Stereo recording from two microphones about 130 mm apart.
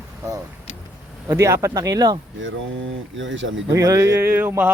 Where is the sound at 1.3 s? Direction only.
25° right (ahead or behind).